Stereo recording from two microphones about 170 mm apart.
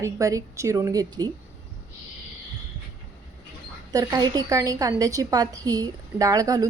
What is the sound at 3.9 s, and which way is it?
A woman's voice, 20° right (ahead or behind).